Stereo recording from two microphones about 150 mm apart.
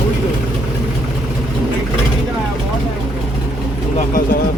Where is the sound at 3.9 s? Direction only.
70° left (ahead or behind).